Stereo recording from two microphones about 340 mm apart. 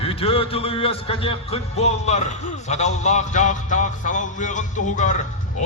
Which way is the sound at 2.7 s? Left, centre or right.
Centre.